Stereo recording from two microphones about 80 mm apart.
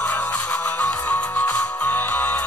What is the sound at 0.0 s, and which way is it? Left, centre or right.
Music, centre.